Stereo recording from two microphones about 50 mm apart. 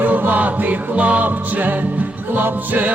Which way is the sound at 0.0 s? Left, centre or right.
Right.